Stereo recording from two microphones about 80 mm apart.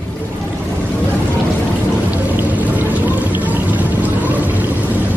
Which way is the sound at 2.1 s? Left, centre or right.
Right.